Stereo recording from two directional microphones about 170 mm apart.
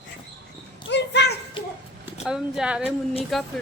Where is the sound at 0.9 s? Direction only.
90° left.